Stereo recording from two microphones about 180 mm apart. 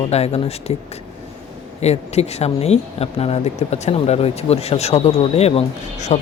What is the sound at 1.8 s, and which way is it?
Speech, 35° left (ahead or behind).